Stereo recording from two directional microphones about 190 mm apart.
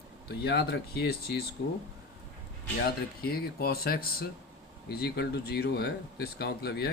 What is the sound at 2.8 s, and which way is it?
Speech, 55° left (ahead or behind).